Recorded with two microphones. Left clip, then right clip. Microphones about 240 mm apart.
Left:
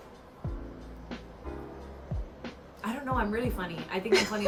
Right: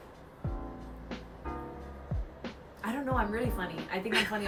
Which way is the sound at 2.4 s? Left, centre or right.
Centre.